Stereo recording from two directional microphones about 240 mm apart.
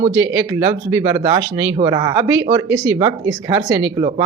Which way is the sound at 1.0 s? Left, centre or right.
Right.